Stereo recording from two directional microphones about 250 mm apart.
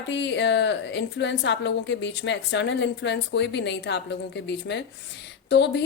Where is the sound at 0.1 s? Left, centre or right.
Left.